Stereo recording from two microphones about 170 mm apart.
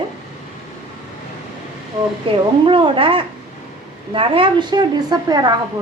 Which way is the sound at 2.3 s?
30° right (ahead or behind).